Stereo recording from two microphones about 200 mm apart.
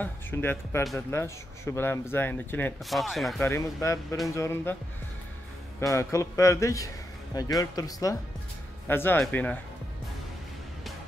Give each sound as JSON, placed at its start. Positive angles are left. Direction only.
{"t": 0.0, "sound": "speech", "side_deg": 10}
{"t": 3.4, "sound": "speech", "side_deg": 15}
{"t": 5.8, "sound": "speech", "side_deg": 15}